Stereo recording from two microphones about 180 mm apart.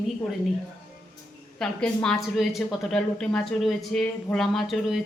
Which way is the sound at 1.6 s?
5° left (ahead or behind).